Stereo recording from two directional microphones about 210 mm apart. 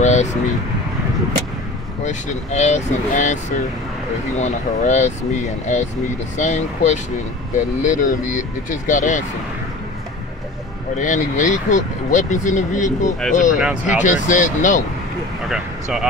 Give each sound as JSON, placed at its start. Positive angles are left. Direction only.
{"t": 0.0, "sound": "a sound", "side_deg": 35}
{"t": 2.0, "sound": "speech", "side_deg": 35}
{"t": 11.0, "sound": "speech", "side_deg": 35}
{"t": 13.6, "sound": "speech", "side_deg": -5}
{"t": 13.9, "sound": "speech", "side_deg": 35}
{"t": 15.4, "sound": "speech", "side_deg": -5}